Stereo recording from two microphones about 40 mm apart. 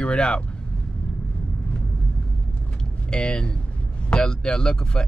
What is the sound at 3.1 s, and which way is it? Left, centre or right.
Speech, left.